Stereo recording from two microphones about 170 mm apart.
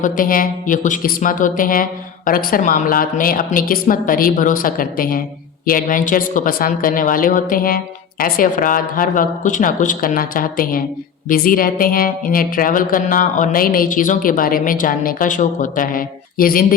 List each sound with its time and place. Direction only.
0.0 s speech: 55° left (ahead or behind)